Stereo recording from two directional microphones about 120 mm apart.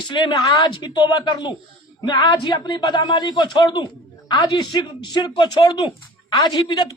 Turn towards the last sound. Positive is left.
turn(degrees=35)  # may be behind; listen again after turning